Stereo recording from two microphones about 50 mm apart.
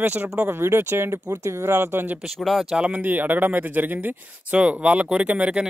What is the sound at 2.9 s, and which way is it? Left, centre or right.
Speech, right.